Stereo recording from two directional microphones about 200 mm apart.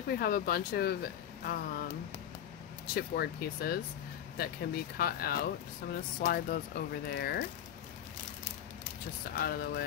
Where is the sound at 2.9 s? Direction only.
50° left (ahead or behind).